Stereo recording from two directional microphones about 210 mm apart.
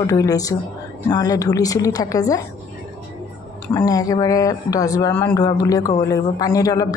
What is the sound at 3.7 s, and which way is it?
Speech, 15° left (ahead or behind).